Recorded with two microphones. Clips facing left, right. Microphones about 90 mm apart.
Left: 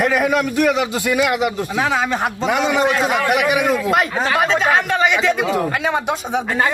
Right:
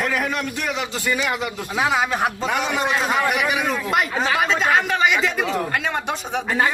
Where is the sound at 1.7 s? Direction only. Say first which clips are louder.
Right 1 dB; 10° right (ahead or behind).